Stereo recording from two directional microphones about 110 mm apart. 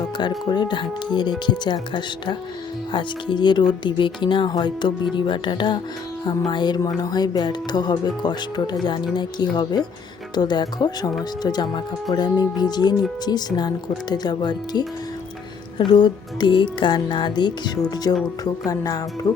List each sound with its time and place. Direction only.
0.2 s speech: 45° left (ahead or behind)